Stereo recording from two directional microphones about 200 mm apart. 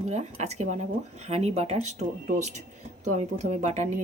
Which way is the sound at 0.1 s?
35° right (ahead or behind).